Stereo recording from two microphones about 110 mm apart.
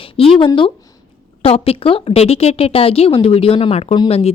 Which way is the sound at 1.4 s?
65° left (ahead or behind).